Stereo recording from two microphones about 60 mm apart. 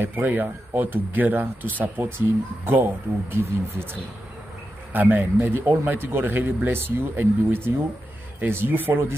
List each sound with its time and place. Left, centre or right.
0.0 s speech: right
4.9 s speech: right